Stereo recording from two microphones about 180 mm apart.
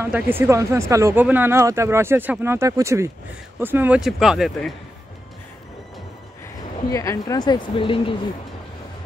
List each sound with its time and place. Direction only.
0.0 s speech: 10° right (ahead or behind)
6.9 s speech: 20° left (ahead or behind)